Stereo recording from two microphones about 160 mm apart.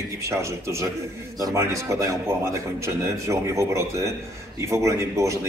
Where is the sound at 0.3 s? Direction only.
15° right (ahead or behind).